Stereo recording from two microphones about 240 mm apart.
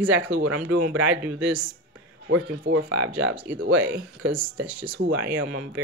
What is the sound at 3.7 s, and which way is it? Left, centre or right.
Speech, centre.